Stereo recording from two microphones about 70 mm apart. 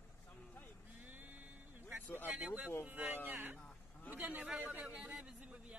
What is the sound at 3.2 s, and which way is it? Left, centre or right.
A man's voice, right.